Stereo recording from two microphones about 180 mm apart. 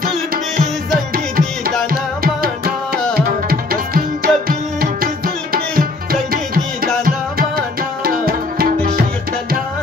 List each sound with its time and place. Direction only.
1.9 s music: 55° right (ahead or behind)
3.2 s tabla: 55° right (ahead or behind)
6.3 s music: 55° right (ahead or behind)